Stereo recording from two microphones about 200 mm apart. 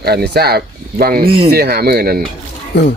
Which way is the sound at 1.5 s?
50° right (ahead or behind).